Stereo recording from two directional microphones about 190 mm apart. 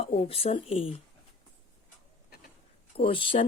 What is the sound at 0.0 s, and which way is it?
Speech, 30° left (ahead or behind).